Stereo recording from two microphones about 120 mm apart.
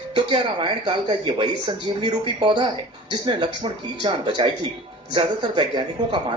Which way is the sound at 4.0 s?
40° right (ahead or behind).